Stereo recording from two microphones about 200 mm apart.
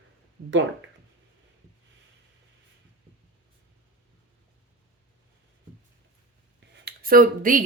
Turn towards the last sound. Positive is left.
turn(degrees=-45)  # may be behind; listen again after turning